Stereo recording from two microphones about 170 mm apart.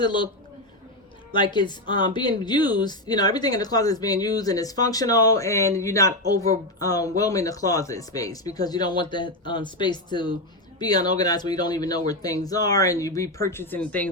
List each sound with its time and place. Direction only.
0.0 s speech: 30° left (ahead or behind)
1.3 s speech: 25° left (ahead or behind); by 14.1 s 10° left (ahead or behind)